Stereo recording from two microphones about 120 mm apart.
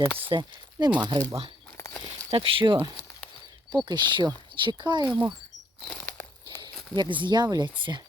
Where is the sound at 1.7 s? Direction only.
30° left (ahead or behind).